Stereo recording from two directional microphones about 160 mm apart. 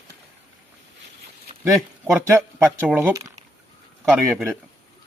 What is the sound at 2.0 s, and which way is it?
Speech, 15° right (ahead or behind).